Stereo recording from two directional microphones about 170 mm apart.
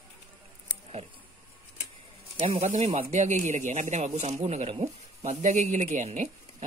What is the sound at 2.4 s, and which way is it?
Speech, 40° right (ahead or behind).